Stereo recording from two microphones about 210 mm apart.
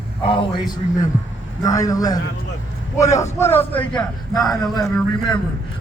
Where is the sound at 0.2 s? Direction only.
25° left (ahead or behind).